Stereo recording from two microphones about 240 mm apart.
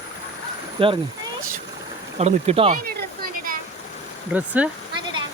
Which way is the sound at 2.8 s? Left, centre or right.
Right.